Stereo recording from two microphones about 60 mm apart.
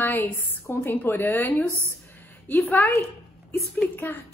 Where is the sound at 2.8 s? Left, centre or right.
Left.